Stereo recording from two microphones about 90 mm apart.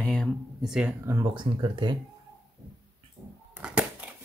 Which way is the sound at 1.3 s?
60° right (ahead or behind).